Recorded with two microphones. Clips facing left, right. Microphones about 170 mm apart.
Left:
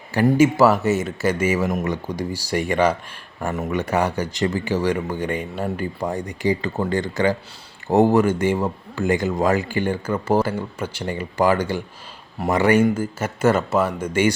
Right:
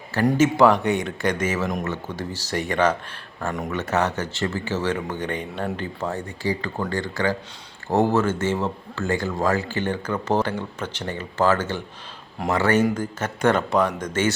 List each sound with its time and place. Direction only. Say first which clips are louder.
0.3 s speech: left 2 dB; 5° left (ahead or behind)